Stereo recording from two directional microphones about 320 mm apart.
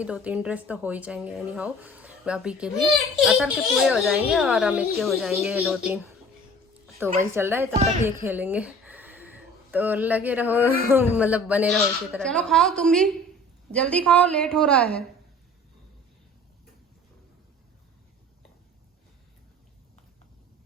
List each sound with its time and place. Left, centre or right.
0.0 s speech: centre
7.0 s a woman's voice: centre